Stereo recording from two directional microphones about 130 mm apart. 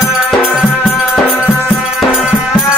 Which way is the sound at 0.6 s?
Centre (ahead or behind).